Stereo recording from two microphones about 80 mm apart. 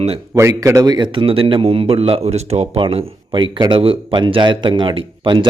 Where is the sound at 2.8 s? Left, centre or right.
Right.